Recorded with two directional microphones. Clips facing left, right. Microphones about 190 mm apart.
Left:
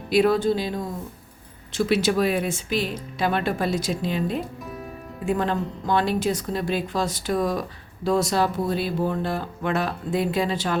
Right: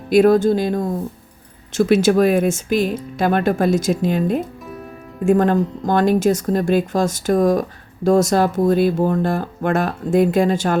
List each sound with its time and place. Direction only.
0.1 s speech: 45° right (ahead or behind)